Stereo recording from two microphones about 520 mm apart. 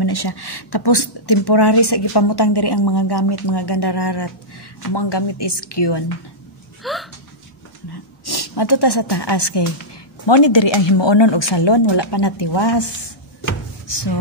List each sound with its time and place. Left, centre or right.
0.0 s a woman's voice: left
6.8 s hiccup: centre
8.3 s a woman's voice: left
13.8 s a sound: left